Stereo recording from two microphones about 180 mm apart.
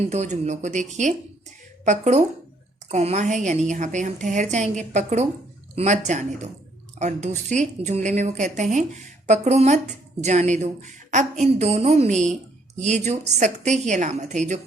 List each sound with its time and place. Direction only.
0.1 s a woman's voice: 40° right (ahead or behind)